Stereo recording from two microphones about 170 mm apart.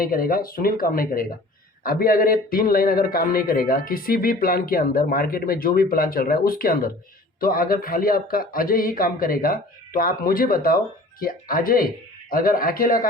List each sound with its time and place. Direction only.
0.0 s speech: 60° left (ahead or behind)